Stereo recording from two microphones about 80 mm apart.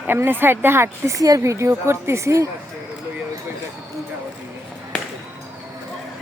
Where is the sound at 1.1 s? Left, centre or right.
Right.